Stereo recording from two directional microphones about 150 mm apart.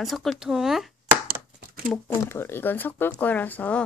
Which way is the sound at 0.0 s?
Centre (ahead or behind).